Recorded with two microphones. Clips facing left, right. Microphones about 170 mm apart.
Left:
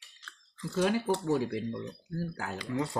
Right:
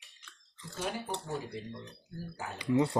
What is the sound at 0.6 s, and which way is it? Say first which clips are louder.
Speech: left 9 dB; 90° left.